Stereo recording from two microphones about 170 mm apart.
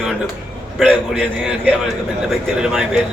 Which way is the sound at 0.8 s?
Centre (ahead or behind).